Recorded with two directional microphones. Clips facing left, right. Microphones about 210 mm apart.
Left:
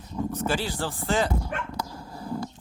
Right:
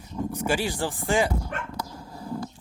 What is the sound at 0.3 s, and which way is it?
Speech, 10° right (ahead or behind).